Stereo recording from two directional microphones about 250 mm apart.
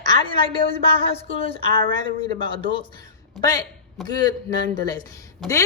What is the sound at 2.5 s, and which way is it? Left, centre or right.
A man's voice, left.